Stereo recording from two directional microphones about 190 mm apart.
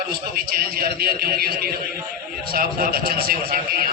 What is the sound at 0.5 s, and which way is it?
A man's voice, 50° right (ahead or behind).